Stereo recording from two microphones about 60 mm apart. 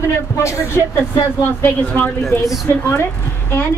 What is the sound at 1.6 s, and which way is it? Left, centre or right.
A woman's voice, left.